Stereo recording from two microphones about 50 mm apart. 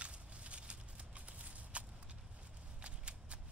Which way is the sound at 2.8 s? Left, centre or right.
Right.